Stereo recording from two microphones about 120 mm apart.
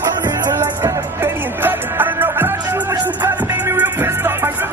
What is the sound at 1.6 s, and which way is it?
Music, 15° right (ahead or behind).